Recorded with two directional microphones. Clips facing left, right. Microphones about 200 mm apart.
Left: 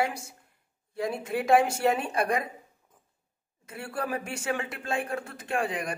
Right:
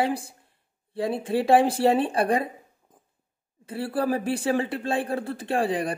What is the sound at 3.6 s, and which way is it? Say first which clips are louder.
Speech: right 8 dB; 30° right (ahead or behind).